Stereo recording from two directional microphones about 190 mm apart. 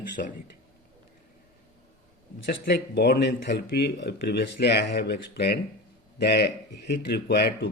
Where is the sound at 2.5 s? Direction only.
65° left (ahead or behind).